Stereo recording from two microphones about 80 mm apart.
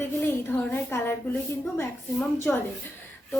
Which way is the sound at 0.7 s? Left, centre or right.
Left.